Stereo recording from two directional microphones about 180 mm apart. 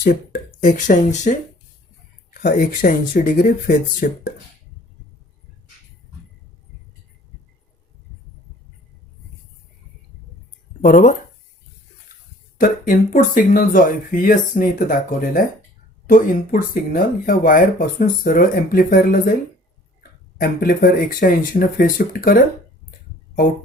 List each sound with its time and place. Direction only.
0.0 s speech: 55° left (ahead or behind)
2.3 s speech: 55° left (ahead or behind)
10.8 s speech: 50° left (ahead or behind)
12.5 s speech: 50° left (ahead or behind)